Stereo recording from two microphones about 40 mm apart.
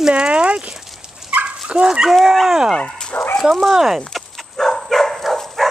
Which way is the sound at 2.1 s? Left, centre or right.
Centre.